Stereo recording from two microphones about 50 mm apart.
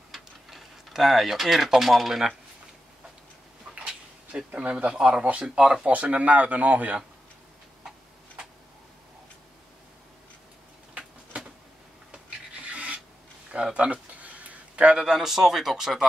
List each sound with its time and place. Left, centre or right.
0.1 s speech: centre
3.7 s a sound: centre
4.5 s speech: right
5.9 s speech: right
12.7 s filing: right
13.5 s speech: centre